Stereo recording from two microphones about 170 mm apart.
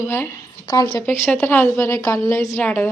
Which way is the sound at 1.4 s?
10° left (ahead or behind).